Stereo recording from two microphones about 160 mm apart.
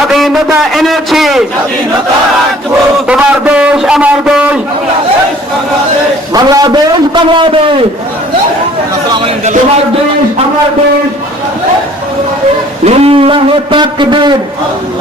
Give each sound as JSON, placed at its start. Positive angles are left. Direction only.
{"t": 0.7, "sound": "a man's voice", "side_deg": 0}
{"t": 3.1, "sound": "a man's voice", "side_deg": -5}
{"t": 6.3, "sound": "a man's voice", "side_deg": -25}
{"t": 9.2, "sound": "a man's voice", "side_deg": -45}
{"t": 12.8, "sound": "a man's voice", "side_deg": -40}